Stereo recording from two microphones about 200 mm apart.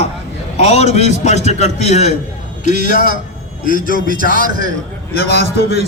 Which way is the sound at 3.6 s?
45° right (ahead or behind).